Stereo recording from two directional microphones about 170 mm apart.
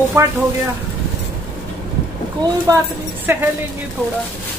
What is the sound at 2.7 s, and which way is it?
Speech, 20° right (ahead or behind).